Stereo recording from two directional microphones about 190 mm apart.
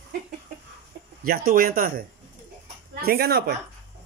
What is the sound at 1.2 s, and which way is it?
Speech, 50° right (ahead or behind).